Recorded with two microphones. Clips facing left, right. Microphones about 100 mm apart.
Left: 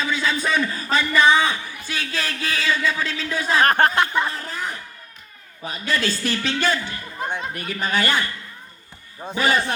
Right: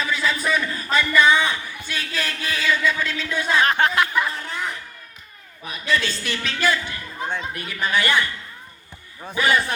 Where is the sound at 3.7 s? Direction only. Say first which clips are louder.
Left 2 dB; 45° left (ahead or behind).